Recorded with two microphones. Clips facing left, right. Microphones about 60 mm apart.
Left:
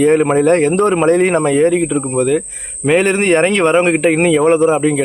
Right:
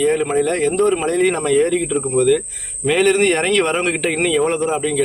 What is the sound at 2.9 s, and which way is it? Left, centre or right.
A man's voice, left.